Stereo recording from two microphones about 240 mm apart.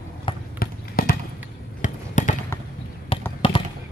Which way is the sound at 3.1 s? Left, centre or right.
Left.